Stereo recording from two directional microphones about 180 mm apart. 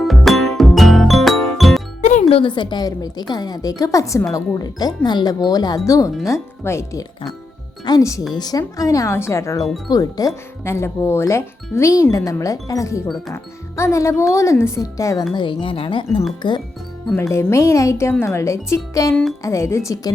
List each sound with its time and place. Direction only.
0.0 s music: centre (ahead or behind)
2.0 s music: 45° left (ahead or behind)
2.6 s a woman's voice: 25° left (ahead or behind)
9.6 s speech: centre (ahead or behind)
9.9 s a woman's voice: 20° left (ahead or behind)
17.2 s speech: 15° left (ahead or behind)